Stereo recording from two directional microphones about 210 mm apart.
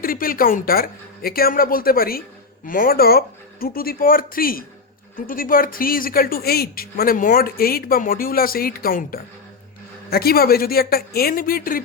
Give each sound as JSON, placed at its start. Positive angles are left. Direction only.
{"t": 0.0, "sound": "speech", "side_deg": 45}